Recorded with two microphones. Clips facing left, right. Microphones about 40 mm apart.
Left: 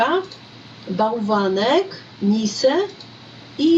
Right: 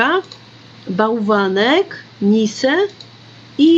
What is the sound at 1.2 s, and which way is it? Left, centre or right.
Speech, right.